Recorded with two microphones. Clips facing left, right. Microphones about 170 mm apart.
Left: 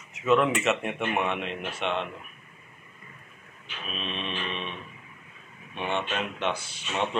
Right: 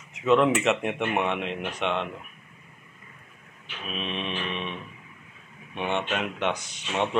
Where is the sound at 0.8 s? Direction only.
20° right (ahead or behind).